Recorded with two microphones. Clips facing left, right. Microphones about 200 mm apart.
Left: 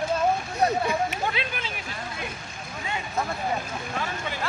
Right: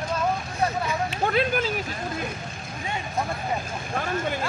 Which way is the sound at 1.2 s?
45° right (ahead or behind).